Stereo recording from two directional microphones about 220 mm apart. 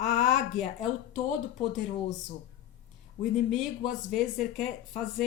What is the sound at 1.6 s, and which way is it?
Speech, 30° left (ahead or behind).